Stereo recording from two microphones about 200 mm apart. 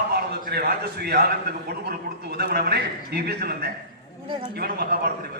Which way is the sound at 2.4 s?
50° right (ahead or behind).